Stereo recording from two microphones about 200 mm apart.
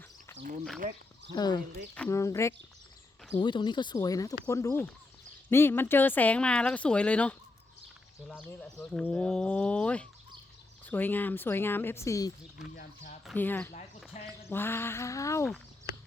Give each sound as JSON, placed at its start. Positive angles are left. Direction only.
{"t": 1.4, "sound": "speech", "side_deg": 20}
{"t": 8.4, "sound": "speech", "side_deg": 5}
{"t": 13.3, "sound": "speech", "side_deg": 10}
{"t": 14.1, "sound": "a sound", "side_deg": 35}
{"t": 14.5, "sound": "speech", "side_deg": 10}